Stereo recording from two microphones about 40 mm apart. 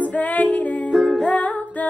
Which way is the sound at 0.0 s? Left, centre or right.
Left.